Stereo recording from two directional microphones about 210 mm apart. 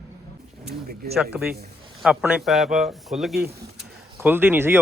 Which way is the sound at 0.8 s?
45° right (ahead or behind).